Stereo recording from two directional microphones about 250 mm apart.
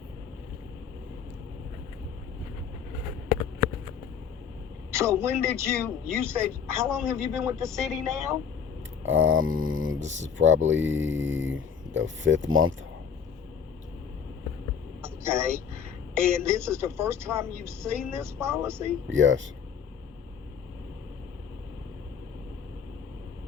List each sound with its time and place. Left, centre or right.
4.9 s a man's voice: centre
7.8 s speech: centre
8.1 s a man's voice: centre
9.0 s speech: right
15.0 s speech: centre
19.0 s speech: right